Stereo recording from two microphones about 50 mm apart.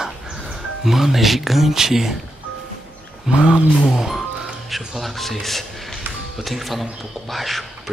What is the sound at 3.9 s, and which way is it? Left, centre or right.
A man's voice, centre.